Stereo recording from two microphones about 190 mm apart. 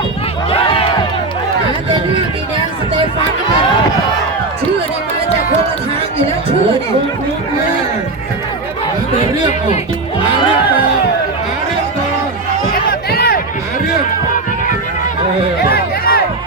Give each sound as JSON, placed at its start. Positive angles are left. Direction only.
{"t": 0.6, "sound": "crowd", "side_deg": 30}
{"t": 12.9, "sound": "music", "side_deg": 55}
{"t": 15.7, "sound": "music", "side_deg": 50}